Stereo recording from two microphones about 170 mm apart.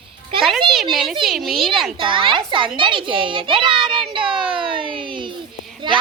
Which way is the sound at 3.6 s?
Centre (ahead or behind).